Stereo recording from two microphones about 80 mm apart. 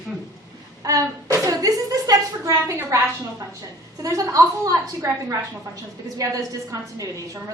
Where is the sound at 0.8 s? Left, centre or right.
Right.